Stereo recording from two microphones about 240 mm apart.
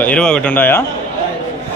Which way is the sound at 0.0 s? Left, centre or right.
Centre.